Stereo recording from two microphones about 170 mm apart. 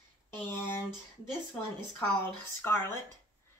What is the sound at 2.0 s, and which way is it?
Speech, 15° left (ahead or behind).